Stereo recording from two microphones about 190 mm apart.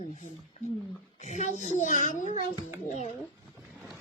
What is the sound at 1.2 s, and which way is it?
Speech, 35° left (ahead or behind).